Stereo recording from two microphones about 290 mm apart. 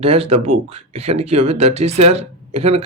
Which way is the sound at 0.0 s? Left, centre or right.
Right.